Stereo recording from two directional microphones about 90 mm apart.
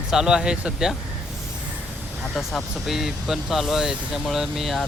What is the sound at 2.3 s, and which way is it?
Speech, centre (ahead or behind).